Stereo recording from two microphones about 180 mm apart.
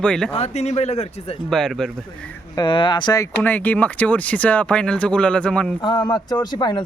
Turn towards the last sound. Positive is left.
turn(degrees=25)  # may be behind; listen again after turning